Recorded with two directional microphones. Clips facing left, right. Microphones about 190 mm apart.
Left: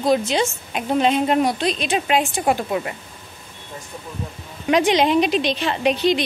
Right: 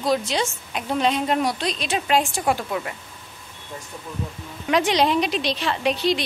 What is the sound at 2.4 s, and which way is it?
Speech, 20° left (ahead or behind).